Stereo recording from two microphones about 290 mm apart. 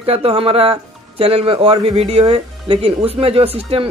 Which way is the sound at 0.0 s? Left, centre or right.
Centre.